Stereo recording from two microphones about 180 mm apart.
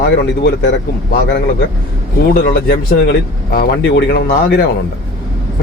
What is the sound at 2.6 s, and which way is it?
Speech, 55° left (ahead or behind).